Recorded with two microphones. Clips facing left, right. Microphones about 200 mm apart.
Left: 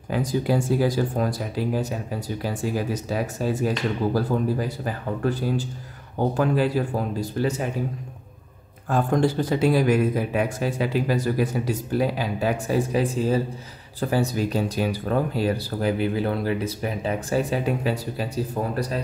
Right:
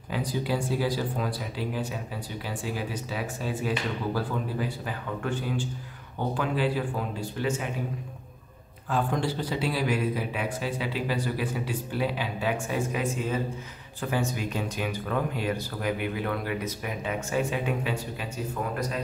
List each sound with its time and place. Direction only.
0.1 s a man's voice: 45° left (ahead or behind)
8.9 s a man's voice: 45° left (ahead or behind)